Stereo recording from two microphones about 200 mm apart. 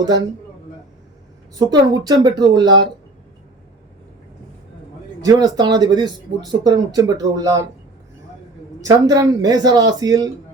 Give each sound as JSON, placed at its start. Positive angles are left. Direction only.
{"t": 1.5, "sound": "speech", "side_deg": -20}
{"t": 5.2, "sound": "speech", "side_deg": -20}
{"t": 8.8, "sound": "speech", "side_deg": -20}